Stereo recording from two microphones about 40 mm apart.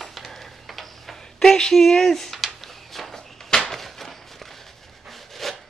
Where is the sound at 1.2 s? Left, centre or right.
Centre.